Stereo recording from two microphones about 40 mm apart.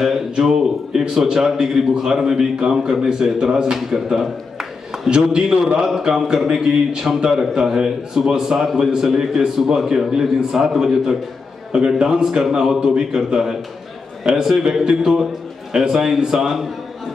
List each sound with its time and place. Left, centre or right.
0.0 s a man's voice: centre